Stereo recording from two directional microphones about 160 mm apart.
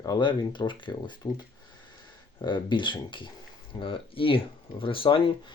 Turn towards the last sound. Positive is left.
turn(degrees=35)  # may be behind; listen again after turning